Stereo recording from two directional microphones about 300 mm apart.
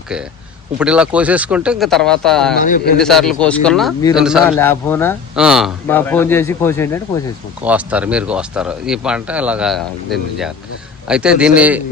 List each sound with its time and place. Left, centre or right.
0.8 s speech: centre
2.6 s a man's voice: left
3.0 s speech: centre
7.6 s speech: centre